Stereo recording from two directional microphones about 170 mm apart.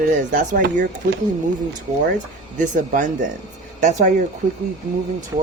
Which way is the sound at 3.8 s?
45° right (ahead or behind).